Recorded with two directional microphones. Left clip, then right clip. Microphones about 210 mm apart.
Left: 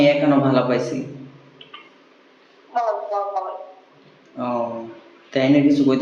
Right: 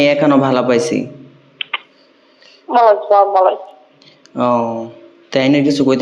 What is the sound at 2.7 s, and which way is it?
Speech, 55° right (ahead or behind).